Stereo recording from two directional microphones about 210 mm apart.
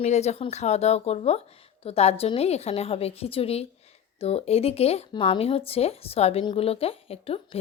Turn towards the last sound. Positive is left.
turn(degrees=25)  # may be behind; listen again after turning